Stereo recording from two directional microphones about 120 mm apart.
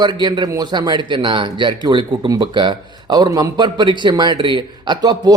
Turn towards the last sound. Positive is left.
turn(degrees=-35)  # may be behind; listen again after turning